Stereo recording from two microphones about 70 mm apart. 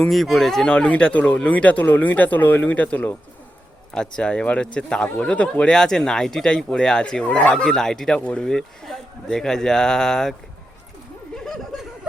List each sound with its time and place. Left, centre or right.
0.1 s speech: centre
0.7 s speech: centre
3.9 s speech: centre
8.4 s speech: centre